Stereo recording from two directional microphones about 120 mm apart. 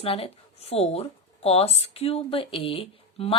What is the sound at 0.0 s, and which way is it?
Speech, 50° left (ahead or behind).